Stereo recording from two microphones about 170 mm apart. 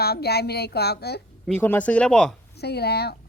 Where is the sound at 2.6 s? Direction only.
70° left (ahead or behind).